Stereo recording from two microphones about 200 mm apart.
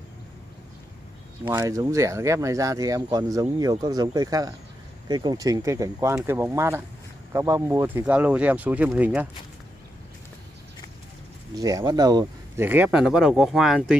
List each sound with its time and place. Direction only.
1.4 s speech: 10° right (ahead or behind)
11.5 s speech: 20° right (ahead or behind)
12.6 s speech: 10° right (ahead or behind)